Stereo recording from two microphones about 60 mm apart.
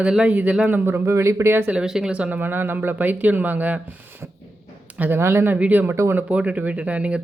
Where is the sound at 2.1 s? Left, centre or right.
Right.